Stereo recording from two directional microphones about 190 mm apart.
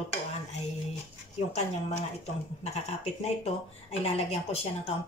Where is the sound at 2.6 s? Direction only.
35° left (ahead or behind).